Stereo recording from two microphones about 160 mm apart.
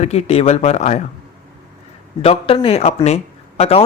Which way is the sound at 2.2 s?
35° left (ahead or behind).